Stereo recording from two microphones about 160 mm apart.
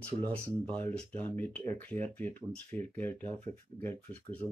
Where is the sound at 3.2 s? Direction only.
40° right (ahead or behind).